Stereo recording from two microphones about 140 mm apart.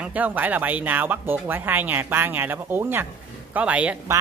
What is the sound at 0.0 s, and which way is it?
Speech, 10° right (ahead or behind).